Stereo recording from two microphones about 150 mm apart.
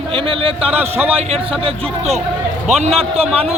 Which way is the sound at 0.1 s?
35° right (ahead or behind).